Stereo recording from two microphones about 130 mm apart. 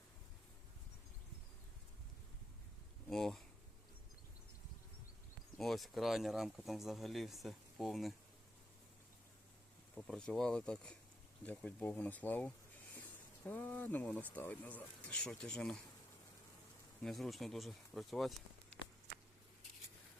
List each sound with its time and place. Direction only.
3.1 s a sound: 5° left (ahead or behind)
5.5 s speech: centre (ahead or behind)
9.9 s speech: 5° left (ahead or behind)
17.0 s speech: centre (ahead or behind)